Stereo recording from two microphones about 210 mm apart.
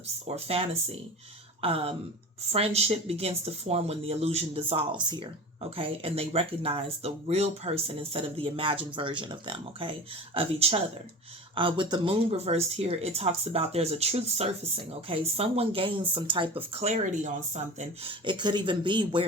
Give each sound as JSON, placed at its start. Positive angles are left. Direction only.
{"t": 0.3, "sound": "speech", "side_deg": -30}